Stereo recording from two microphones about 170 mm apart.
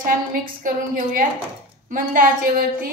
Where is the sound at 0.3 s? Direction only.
55° right (ahead or behind).